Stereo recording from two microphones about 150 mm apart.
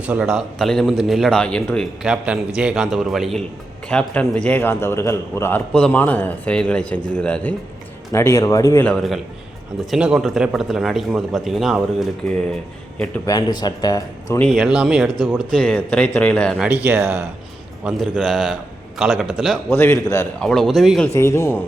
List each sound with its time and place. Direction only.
0.0 s speech: 5° right (ahead or behind)
2.0 s a man's voice: 10° right (ahead or behind)
8.1 s a man's voice: 20° left (ahead or behind)
9.9 s speech: 5° right (ahead or behind)
13.2 s speech: 25° left (ahead or behind)
14.5 s speech: 5° right (ahead or behind)
15.4 s a man's voice: 5° left (ahead or behind)
16.6 s speech: 10° right (ahead or behind)
19.7 s a man's voice: 15° left (ahead or behind)
20.4 s speech: 5° left (ahead or behind)
21.1 s a man's voice: 20° left (ahead or behind)